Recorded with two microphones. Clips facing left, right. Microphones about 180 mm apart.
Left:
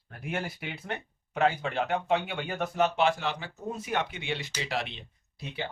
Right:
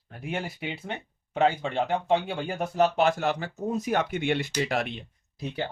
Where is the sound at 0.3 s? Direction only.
30° right (ahead or behind).